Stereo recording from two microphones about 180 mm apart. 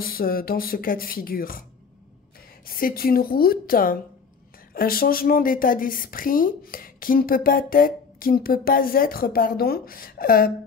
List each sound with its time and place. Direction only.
0.0 s a woman's voice: 55° left (ahead or behind)
2.6 s a woman's voice: 55° left (ahead or behind)